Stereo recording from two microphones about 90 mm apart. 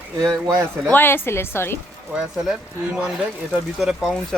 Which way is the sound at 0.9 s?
25° left (ahead or behind).